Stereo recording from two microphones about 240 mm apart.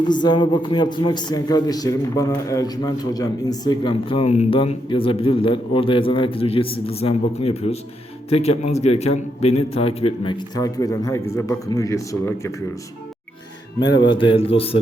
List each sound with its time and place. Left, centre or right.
0.0 s a man's voice: centre
14.1 s a man's voice: left